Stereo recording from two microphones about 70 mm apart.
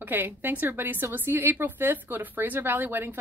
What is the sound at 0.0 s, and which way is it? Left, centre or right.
A woman's voice, right.